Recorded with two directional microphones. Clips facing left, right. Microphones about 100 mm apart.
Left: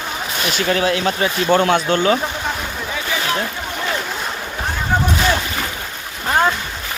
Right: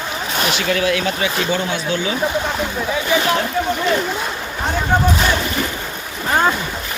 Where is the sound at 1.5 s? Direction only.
60° left (ahead or behind).